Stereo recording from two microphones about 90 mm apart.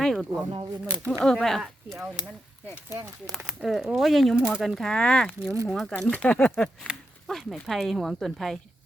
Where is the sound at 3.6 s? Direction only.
Centre (ahead or behind).